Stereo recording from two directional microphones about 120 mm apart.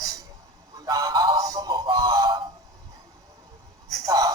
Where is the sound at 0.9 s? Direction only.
30° right (ahead or behind).